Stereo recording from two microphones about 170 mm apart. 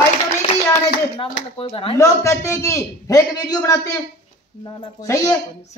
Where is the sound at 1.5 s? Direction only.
30° left (ahead or behind).